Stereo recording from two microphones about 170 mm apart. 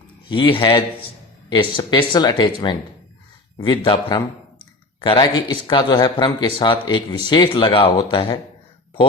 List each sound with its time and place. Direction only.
0.3 s a man's voice: 30° left (ahead or behind)